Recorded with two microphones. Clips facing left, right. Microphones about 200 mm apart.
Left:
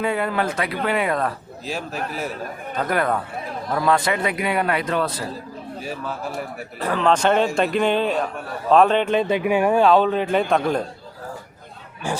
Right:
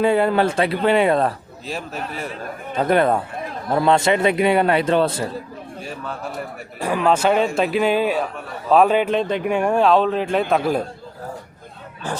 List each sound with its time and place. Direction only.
0.0 s a man's voice: 30° right (ahead or behind)
1.6 s a man's voice: centre (ahead or behind)
2.7 s a man's voice: 25° right (ahead or behind)
5.8 s a man's voice: centre (ahead or behind)
6.7 s a man's voice: 10° right (ahead or behind)
12.1 s speech: 10° left (ahead or behind)